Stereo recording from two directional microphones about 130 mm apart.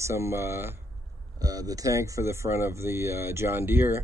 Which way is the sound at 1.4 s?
30° right (ahead or behind).